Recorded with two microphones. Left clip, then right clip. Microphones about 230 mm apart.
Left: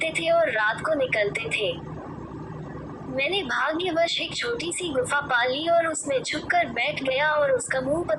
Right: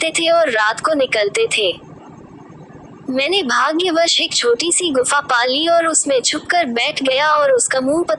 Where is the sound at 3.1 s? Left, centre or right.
Right.